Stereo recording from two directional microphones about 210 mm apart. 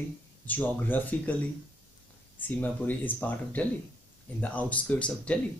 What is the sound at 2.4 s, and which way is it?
Speech, 10° left (ahead or behind).